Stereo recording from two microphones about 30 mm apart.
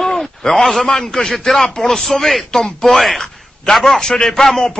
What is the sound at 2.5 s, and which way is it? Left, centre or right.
Speech, centre.